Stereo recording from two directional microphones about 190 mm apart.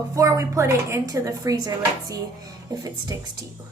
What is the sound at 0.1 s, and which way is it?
A woman's voice, 15° right (ahead or behind).